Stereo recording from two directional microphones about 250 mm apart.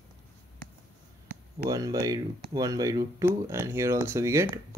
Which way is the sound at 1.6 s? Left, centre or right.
Centre.